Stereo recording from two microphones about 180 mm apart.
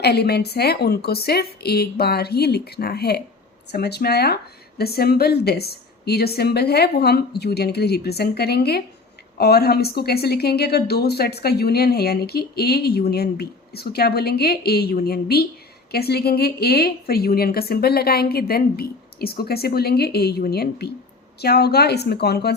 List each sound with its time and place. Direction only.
0.0 s a woman's voice: 65° left (ahead or behind)